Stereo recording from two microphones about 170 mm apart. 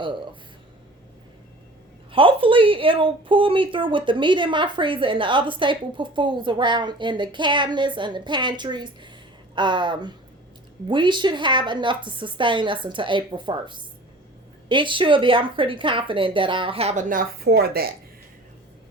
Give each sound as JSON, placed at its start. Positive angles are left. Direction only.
{"t": 2.1, "sound": "a woman's voice", "side_deg": -30}